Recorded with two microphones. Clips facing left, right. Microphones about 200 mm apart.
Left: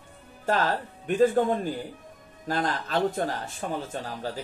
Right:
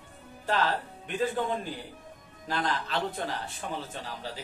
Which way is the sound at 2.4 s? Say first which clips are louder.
Left 3 dB; 45° left (ahead or behind).